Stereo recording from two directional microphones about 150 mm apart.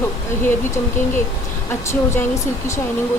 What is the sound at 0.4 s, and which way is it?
Speech, 15° left (ahead or behind).